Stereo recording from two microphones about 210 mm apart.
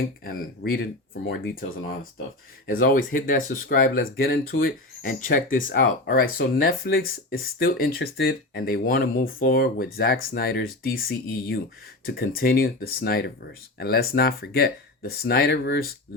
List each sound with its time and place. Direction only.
0.3 s speech: 45° left (ahead or behind)
2.6 s speech: 45° left (ahead or behind)
12.0 s speech: 45° left (ahead or behind)